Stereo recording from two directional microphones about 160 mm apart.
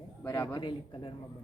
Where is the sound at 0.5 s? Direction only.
30° left (ahead or behind).